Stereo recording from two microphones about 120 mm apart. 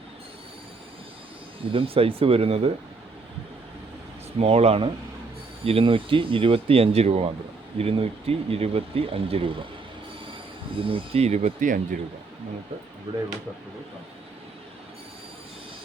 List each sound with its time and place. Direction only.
1.7 s speech: 50° right (ahead or behind)
4.4 s speech: 60° right (ahead or behind)
10.8 s speech: 50° right (ahead or behind); by 11.9 s 90° right
13.1 s speech: 55° right (ahead or behind)